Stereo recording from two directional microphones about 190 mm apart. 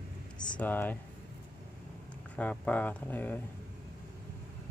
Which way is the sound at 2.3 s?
5° left (ahead or behind).